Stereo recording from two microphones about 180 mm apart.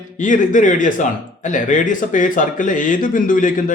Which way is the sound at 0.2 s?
45° left (ahead or behind).